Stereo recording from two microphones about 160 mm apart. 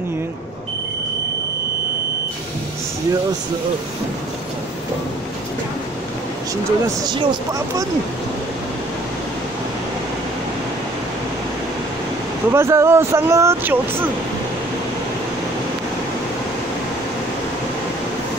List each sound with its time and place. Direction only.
6.5 s speech: 25° right (ahead or behind)
12.4 s speech: 15° right (ahead or behind)